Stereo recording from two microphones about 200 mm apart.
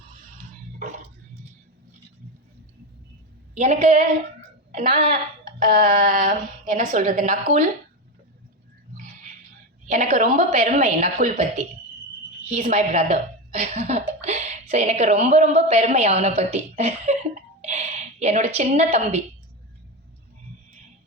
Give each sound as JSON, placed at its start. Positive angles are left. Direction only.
{"t": 0.8, "sound": "a sound", "side_deg": -35}
{"t": 3.5, "sound": "a woman's voice", "side_deg": -35}
{"t": 9.8, "sound": "speech", "side_deg": -40}